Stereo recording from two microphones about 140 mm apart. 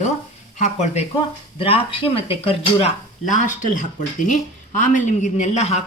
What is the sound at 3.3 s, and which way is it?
Speech, 65° left (ahead or behind).